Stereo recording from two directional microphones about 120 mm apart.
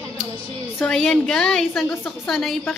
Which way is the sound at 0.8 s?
Centre (ahead or behind).